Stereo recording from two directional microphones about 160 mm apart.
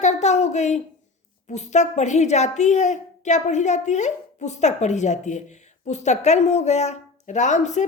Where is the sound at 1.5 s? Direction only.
45° left (ahead or behind).